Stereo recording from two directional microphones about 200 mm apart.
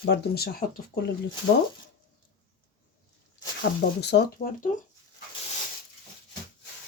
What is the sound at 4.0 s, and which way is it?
Speech, 55° left (ahead or behind).